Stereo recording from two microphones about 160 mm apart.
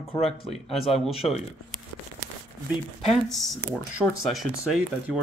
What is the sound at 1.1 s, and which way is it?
Speech, 40° left (ahead or behind).